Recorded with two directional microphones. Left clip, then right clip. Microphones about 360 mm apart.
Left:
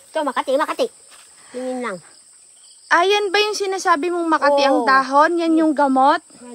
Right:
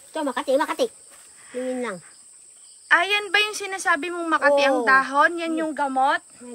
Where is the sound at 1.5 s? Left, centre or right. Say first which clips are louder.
Left 2 dB; centre.